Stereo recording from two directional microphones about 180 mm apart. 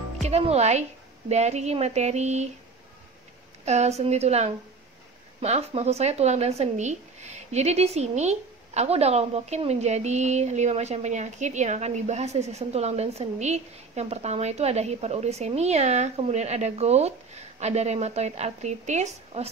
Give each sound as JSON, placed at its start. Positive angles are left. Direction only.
{"t": 0.2, "sound": "speech", "side_deg": -35}
{"t": 3.6, "sound": "speech", "side_deg": -40}